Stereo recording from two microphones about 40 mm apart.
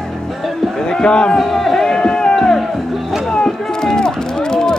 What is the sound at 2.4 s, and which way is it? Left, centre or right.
Music, centre.